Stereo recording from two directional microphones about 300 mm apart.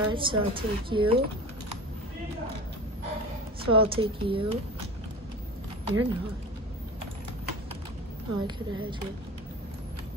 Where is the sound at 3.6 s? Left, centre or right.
Centre.